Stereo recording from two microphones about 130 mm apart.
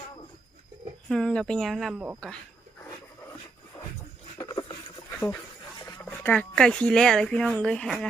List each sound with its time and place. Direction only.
1.0 s speech: 5° left (ahead or behind)
4.4 s boat: 30° left (ahead or behind)
6.1 s speech: 15° left (ahead or behind)